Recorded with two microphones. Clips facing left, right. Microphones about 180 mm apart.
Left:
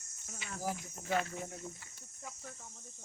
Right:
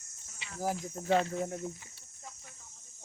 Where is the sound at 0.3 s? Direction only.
25° right (ahead or behind).